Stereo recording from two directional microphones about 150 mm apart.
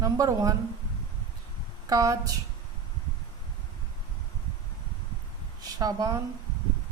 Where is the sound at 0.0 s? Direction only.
25° right (ahead or behind).